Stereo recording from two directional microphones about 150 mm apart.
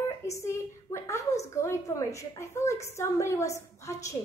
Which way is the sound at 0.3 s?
20° left (ahead or behind).